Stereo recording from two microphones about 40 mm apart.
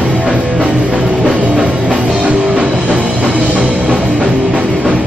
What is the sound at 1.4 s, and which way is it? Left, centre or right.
Music, right.